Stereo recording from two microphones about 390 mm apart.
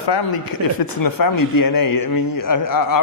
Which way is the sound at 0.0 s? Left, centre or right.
Left.